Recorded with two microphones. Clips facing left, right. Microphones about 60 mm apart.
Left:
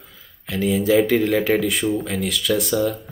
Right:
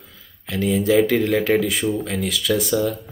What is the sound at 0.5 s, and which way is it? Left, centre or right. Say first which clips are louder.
Speech: even; centre.